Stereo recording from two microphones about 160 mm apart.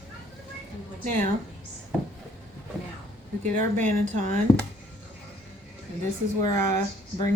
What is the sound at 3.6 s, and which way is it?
Speech, 50° right (ahead or behind).